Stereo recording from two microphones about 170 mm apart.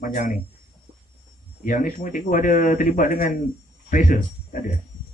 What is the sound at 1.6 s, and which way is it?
Speech, 50° left (ahead or behind).